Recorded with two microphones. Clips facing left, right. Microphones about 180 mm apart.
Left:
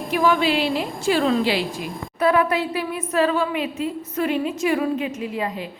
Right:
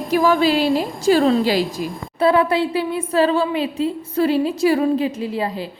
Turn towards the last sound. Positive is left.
turn(degrees=-30)  # may be behind; listen again after turning